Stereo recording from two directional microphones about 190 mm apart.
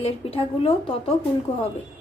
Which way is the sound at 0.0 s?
30° left (ahead or behind).